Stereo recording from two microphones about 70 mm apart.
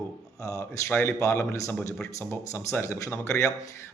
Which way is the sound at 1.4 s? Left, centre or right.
Left.